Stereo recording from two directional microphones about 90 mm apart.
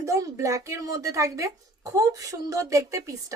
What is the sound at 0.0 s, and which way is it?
A woman's voice, 35° right (ahead or behind).